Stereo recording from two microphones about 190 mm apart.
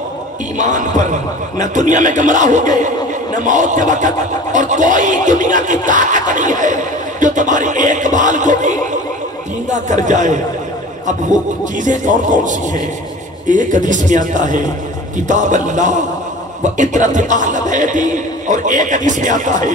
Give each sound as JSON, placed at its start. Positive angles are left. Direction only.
{"t": 0.6, "sound": "speech", "side_deg": -40}
{"t": 10.0, "sound": "speech", "side_deg": -40}
{"t": 11.8, "sound": "speech", "side_deg": -40}